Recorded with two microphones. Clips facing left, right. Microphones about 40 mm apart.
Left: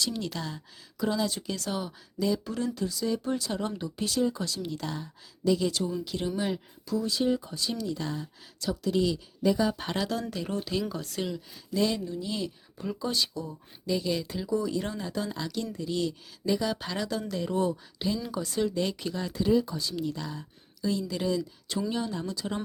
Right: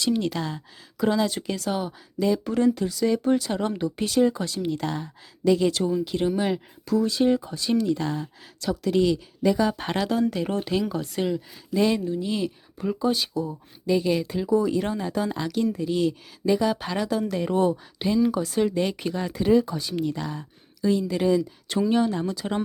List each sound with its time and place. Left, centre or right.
0.0 s speech: right
1.7 s speech: right
4.4 s speech: right
6.1 s speech: right
6.3 s speech: right
7.3 s speech: right
7.5 s speech: right
10.1 s speech: right
13.8 s speech: right
17.3 s speech: right
21.7 s speech: right